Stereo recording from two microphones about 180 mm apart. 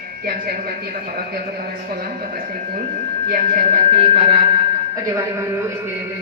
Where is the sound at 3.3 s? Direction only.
40° right (ahead or behind).